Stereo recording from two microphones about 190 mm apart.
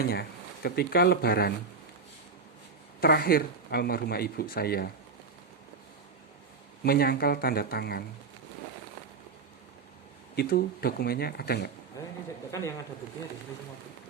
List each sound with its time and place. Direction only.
0.0 s speech: 55° left (ahead or behind)
3.0 s speech: 55° left (ahead or behind)
6.8 s speech: 50° left (ahead or behind)
10.3 s speech: 55° left (ahead or behind)
12.0 s speech: 15° left (ahead or behind)